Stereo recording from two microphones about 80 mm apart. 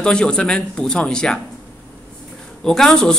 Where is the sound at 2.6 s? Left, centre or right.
Centre.